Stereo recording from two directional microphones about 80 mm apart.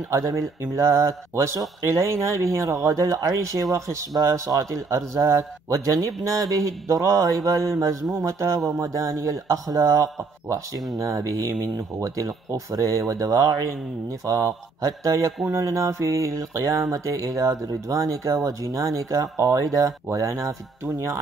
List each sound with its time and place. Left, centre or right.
0.1 s speech: right